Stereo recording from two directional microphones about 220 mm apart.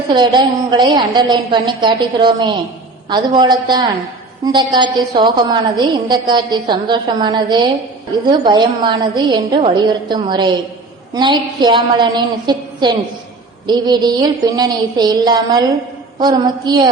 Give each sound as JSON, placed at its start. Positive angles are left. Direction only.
{"t": 0.1, "sound": "a woman's voice", "side_deg": -20}